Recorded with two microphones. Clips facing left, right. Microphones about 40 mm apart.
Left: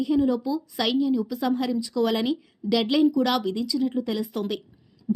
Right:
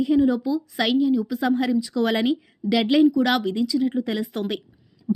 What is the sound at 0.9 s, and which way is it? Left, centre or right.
A woman's voice, centre.